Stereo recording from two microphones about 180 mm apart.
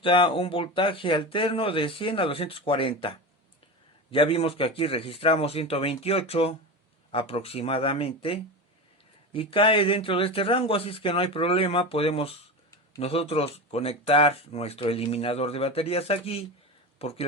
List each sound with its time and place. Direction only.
0.0 s speech: 30° left (ahead or behind)